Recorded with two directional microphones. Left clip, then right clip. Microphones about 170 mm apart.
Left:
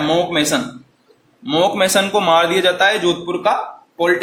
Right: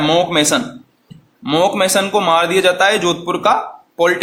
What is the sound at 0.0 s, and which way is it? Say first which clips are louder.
A man's voice: right 3 dB; 35° right (ahead or behind).